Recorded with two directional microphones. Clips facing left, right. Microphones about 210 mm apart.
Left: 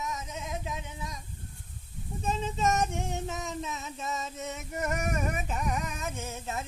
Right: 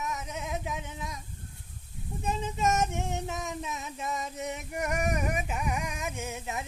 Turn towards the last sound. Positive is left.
turn(degrees=-15)  # may be behind; listen again after turning